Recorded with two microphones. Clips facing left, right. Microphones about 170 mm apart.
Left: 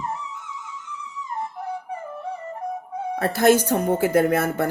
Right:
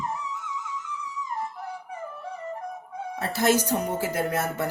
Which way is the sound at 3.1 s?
60° left (ahead or behind).